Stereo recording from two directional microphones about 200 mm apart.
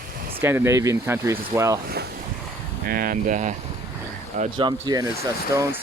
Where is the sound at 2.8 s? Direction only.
45° right (ahead or behind).